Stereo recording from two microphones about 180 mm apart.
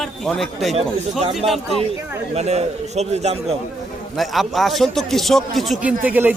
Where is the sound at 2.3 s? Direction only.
35° right (ahead or behind).